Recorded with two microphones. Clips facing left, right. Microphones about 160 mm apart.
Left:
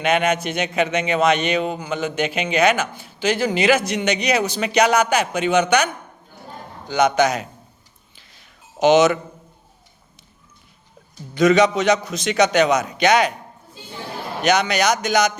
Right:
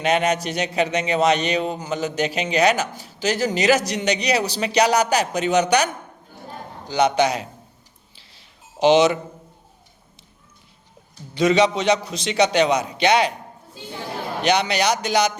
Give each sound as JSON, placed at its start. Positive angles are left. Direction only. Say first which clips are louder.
{"t": 0.0, "sound": "speech", "louder": "left 1 dB", "side_deg": -35}
{"t": 8.1, "sound": "a sound", "louder": "left 3 dB", "side_deg": -30}
{"t": 11.3, "sound": "a man's voice", "louder": "left 2 dB", "side_deg": -30}
{"t": 14.4, "sound": "speech", "louder": "left 2 dB", "side_deg": -30}